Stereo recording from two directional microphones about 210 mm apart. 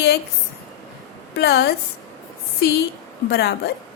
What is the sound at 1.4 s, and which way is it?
Speech, 50° left (ahead or behind).